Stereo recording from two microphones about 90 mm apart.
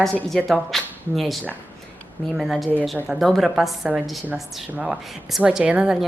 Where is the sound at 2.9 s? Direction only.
20° right (ahead or behind).